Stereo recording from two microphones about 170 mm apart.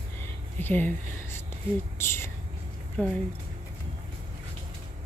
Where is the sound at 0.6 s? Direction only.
10° left (ahead or behind).